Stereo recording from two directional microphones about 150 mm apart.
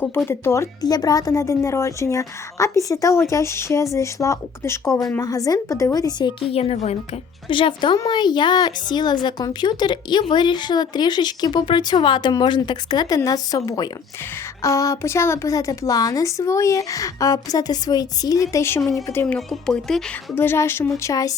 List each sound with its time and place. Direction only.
0.3 s a woman's voice: 15° left (ahead or behind)
6.5 s a woman's voice: 40° left (ahead or behind); by 19.2 s 20° left (ahead or behind)
19.2 s speech: 5° left (ahead or behind); by 21.3 s 20° left (ahead or behind)